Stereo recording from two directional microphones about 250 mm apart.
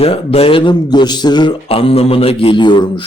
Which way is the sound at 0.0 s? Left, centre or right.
Left.